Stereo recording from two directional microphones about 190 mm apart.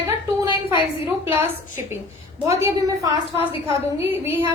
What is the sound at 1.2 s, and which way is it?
A woman's voice, 10° right (ahead or behind).